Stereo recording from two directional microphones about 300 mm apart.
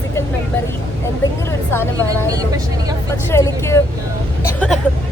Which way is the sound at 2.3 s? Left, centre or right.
Centre.